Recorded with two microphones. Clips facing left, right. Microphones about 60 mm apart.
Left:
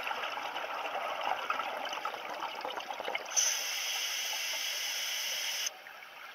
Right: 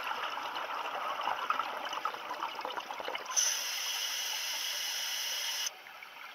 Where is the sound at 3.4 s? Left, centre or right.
Left.